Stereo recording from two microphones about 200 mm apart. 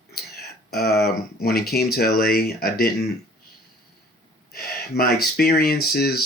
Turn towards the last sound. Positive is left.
turn(degrees=50)  # may be behind; listen again after turning